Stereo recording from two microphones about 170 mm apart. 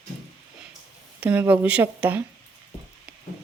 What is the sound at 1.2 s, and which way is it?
Speech, 10° right (ahead or behind).